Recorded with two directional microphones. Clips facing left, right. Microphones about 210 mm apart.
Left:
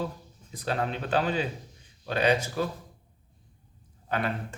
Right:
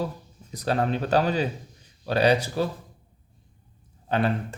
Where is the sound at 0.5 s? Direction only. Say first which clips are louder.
Right 5 dB; 40° right (ahead or behind).